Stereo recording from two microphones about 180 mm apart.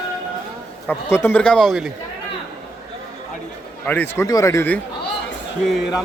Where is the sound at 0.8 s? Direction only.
10° left (ahead or behind).